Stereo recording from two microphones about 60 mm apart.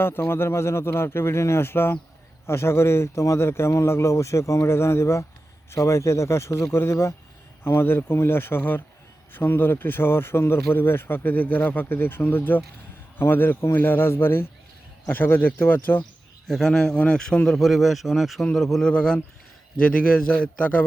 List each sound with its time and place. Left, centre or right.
0.0 s a man's voice: left
16.5 s a man's voice: centre
17.5 s speech: centre
18.9 s a man's voice: centre